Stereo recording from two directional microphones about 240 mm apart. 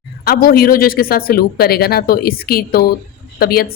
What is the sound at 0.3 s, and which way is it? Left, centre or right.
Speech, left.